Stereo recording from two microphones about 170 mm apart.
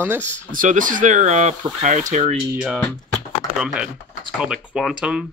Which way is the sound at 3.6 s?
5° right (ahead or behind).